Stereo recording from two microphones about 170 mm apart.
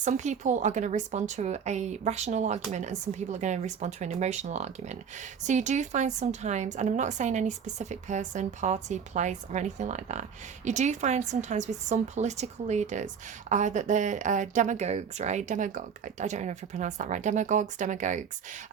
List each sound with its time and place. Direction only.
0.0 s a woman's voice: 45° right (ahead or behind)